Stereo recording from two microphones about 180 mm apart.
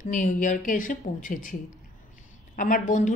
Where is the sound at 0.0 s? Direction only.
45° left (ahead or behind).